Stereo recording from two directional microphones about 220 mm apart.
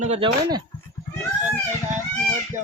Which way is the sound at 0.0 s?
30° right (ahead or behind).